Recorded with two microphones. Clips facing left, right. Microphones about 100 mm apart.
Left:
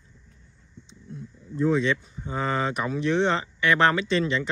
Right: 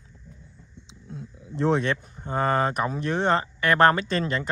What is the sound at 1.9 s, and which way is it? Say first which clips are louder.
Speech: right 2 dB; 50° right (ahead or behind).